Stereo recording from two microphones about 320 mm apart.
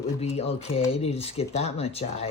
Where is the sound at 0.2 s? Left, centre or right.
Centre.